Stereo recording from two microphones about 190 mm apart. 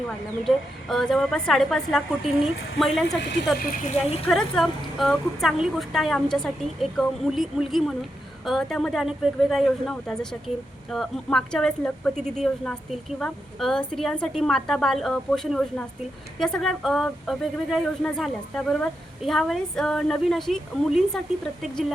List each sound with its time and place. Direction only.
0.4 s a woman's voice: centre (ahead or behind)
3.6 s speech: 40° left (ahead or behind)
4.3 s a woman's voice: centre (ahead or behind)